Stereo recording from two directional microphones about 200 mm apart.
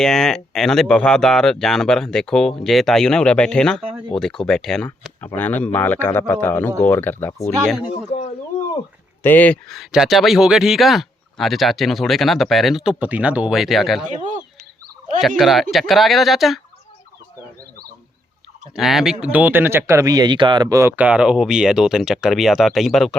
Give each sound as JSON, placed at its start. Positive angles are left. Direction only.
{"t": 0.0, "sound": "speech", "side_deg": 5}
{"t": 9.2, "sound": "speech", "side_deg": 10}
{"t": 15.4, "sound": "speech", "side_deg": 0}
{"t": 18.8, "sound": "speech", "side_deg": 0}